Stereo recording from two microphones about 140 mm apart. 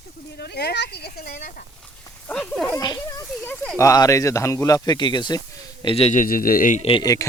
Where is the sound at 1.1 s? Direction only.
90° left.